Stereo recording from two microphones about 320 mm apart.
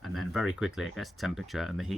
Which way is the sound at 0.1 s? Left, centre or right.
Centre.